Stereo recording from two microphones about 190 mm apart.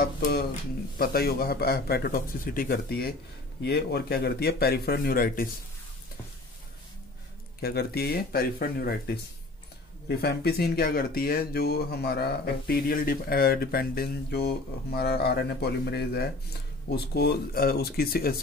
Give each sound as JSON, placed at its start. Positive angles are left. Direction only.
{"t": 0.0, "sound": "speech", "side_deg": 55}
{"t": 7.6, "sound": "speech", "side_deg": 55}